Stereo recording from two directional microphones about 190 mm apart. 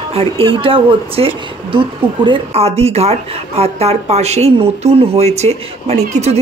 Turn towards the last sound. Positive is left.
turn(degrees=-35)  # may be behind; listen again after turning